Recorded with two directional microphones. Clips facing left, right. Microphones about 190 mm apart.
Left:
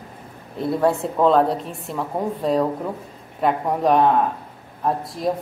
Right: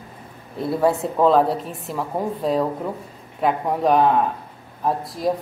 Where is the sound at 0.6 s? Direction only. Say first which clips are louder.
Even; centre (ahead or behind).